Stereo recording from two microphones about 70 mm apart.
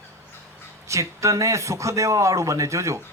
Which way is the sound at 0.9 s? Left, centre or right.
Right.